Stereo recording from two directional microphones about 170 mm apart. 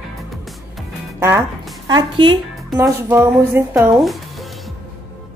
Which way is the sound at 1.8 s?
25° right (ahead or behind).